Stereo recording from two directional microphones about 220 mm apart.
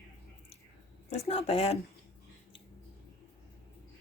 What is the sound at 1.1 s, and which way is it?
Speech, 25° left (ahead or behind).